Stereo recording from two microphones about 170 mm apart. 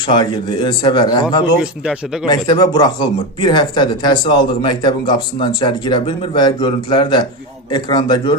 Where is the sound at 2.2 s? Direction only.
25° left (ahead or behind).